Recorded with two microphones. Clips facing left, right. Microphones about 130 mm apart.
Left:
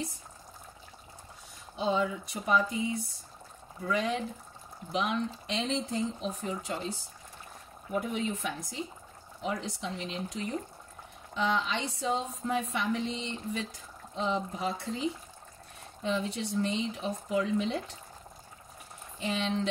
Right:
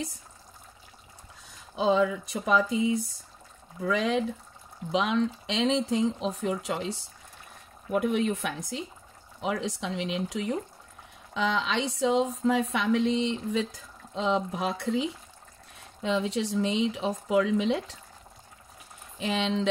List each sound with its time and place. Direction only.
1.8 s a woman's voice: 90° right
19.1 s a woman's voice: 90° right